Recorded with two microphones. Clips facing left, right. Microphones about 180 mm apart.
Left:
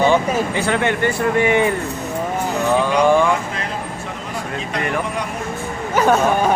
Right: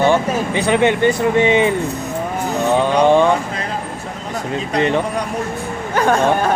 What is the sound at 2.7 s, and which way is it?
Speech, 20° right (ahead or behind).